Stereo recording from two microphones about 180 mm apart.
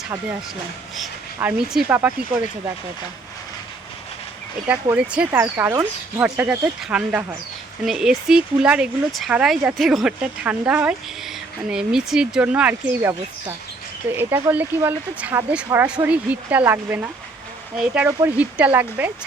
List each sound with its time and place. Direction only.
1.4 s speech: 5° right (ahead or behind)
4.7 s speech: 10° right (ahead or behind)